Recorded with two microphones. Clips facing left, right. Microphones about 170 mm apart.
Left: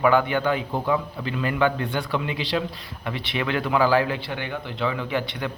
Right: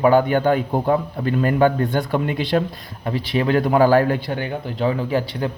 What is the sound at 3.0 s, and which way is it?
A man's voice, 35° right (ahead or behind).